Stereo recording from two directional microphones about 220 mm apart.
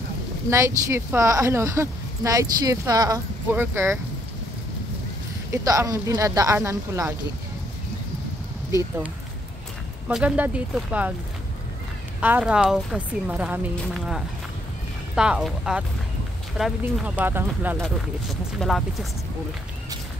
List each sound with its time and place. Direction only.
0.5 s speech: 15° right (ahead or behind)
5.5 s speech: 15° right (ahead or behind)
10.0 s speech: 5° right (ahead or behind)
12.2 s speech: 5° right (ahead or behind)
18.6 s speech: centre (ahead or behind)